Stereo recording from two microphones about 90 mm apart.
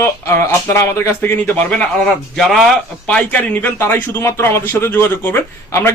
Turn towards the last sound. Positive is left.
turn(degrees=30)  # may be behind; listen again after turning